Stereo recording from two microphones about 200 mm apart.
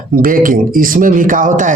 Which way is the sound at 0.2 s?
45° right (ahead or behind).